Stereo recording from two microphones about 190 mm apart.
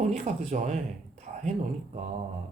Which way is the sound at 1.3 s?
40° right (ahead or behind).